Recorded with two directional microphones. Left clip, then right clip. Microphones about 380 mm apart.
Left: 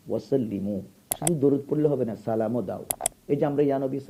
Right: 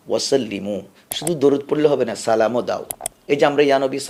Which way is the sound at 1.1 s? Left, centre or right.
Centre.